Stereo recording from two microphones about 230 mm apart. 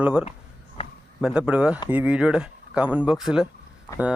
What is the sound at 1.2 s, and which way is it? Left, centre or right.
Speech, centre.